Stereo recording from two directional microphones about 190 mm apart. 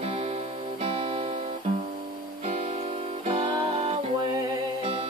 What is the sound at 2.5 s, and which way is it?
Music, 35° right (ahead or behind).